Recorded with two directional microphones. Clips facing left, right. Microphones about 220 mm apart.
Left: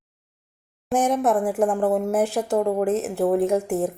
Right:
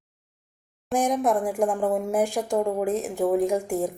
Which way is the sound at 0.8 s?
5° left (ahead or behind).